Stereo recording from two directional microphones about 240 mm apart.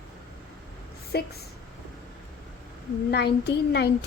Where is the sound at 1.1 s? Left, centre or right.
Left.